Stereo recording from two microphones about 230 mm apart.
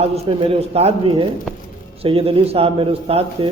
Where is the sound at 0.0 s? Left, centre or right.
Right.